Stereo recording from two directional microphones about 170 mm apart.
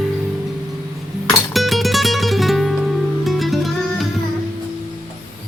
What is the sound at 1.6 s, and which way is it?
Music, centre (ahead or behind).